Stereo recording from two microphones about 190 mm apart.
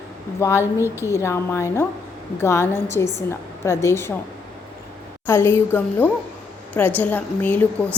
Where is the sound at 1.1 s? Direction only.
15° left (ahead or behind).